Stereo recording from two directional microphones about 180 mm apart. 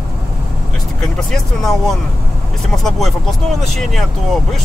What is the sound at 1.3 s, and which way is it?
Speech, centre (ahead or behind).